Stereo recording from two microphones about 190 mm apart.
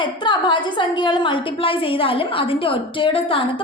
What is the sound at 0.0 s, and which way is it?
A woman's voice, 25° left (ahead or behind).